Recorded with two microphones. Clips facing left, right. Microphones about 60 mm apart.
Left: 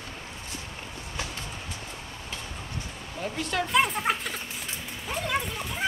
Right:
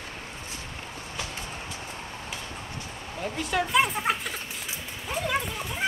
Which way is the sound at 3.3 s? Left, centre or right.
Centre.